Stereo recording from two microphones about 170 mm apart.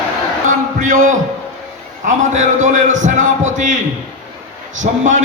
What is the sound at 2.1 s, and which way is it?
A man's voice, 45° right (ahead or behind).